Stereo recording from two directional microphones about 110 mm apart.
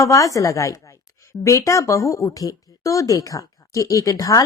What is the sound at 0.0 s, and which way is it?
A woman's voice, 30° left (ahead or behind).